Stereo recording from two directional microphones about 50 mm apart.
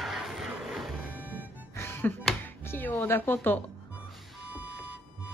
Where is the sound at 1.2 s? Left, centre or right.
Right.